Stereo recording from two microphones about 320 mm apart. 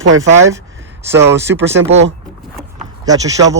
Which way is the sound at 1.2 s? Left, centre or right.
Right.